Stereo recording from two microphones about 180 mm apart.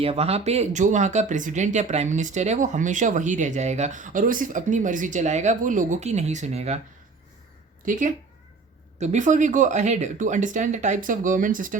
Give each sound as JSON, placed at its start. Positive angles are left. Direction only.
{"t": 0.0, "sound": "speech", "side_deg": -35}
{"t": 7.9, "sound": "speech", "side_deg": -45}